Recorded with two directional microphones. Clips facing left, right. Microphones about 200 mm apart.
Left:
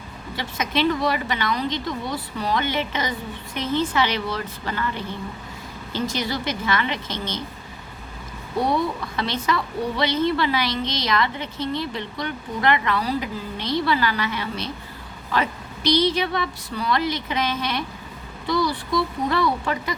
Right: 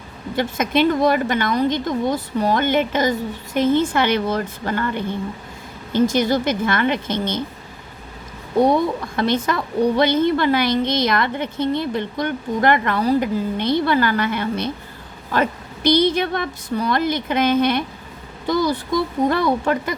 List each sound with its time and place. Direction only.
0.3 s a woman's voice: 50° right (ahead or behind)
9.1 s a woman's voice: 50° right (ahead or behind)